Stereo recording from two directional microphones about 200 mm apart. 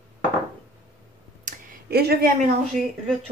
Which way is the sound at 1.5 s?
40° right (ahead or behind).